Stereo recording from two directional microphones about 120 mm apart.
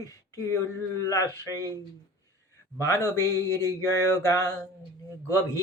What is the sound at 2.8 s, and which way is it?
Speech, 25° left (ahead or behind).